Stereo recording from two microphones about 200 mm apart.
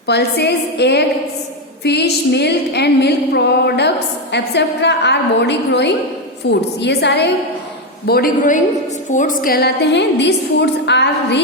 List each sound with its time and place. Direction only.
0.1 s a woman's voice: 55° left (ahead or behind)